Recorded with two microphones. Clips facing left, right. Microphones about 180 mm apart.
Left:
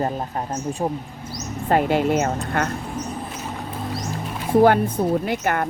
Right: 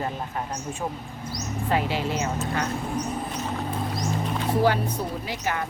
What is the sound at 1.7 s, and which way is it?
Speech, 50° left (ahead or behind).